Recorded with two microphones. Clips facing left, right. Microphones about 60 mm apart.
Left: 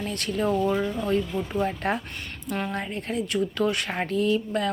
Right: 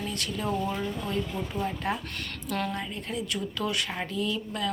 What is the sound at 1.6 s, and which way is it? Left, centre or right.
Speech, left.